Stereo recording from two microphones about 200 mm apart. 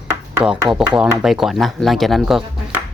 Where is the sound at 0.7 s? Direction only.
5° right (ahead or behind).